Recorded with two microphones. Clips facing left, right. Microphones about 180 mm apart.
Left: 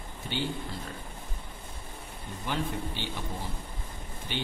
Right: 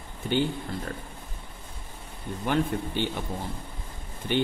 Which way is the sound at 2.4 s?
55° right (ahead or behind).